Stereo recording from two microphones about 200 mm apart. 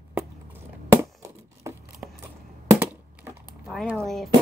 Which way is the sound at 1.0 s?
15° right (ahead or behind).